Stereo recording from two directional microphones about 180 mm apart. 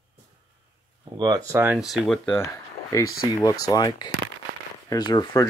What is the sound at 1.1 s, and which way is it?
Speech, 25° right (ahead or behind).